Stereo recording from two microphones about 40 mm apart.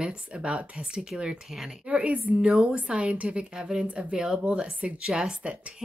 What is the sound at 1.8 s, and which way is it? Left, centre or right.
A woman's voice, right.